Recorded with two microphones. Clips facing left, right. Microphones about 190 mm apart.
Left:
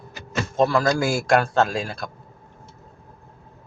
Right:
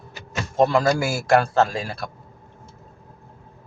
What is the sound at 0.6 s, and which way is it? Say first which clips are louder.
Speech: right 2 dB; 20° right (ahead or behind).